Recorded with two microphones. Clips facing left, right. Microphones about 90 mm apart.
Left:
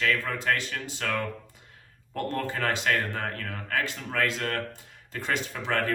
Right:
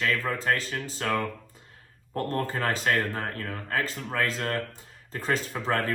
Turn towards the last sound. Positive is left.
turn(degrees=-40)  # may be behind; listen again after turning